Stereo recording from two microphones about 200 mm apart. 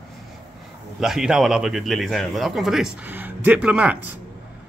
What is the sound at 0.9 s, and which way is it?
Speech, centre (ahead or behind).